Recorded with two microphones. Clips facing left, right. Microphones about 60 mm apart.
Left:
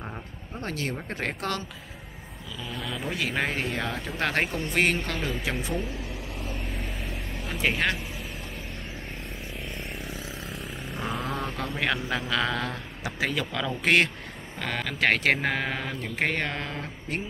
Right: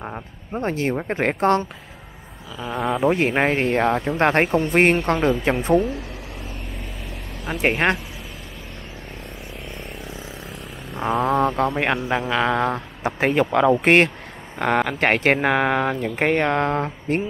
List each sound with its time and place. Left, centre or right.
0.0 s speech: right
2.6 s speech: right
7.6 s speech: right
11.1 s speech: centre
11.4 s speech: right